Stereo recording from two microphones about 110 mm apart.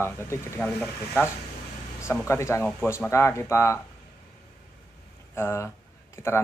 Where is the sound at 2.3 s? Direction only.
25° left (ahead or behind).